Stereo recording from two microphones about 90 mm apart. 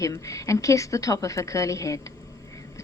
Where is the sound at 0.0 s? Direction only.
35° left (ahead or behind).